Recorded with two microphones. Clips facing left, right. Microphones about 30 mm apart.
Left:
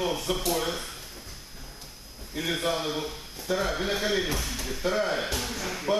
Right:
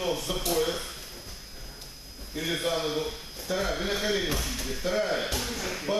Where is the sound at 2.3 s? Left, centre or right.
Centre.